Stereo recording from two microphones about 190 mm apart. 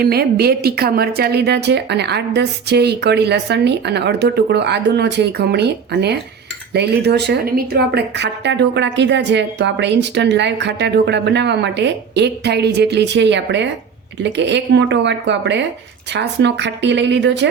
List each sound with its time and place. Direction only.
0.0 s speech: 55° right (ahead or behind)